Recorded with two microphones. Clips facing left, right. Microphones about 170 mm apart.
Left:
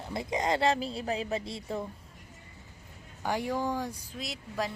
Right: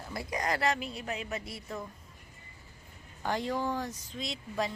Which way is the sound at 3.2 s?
10° left (ahead or behind).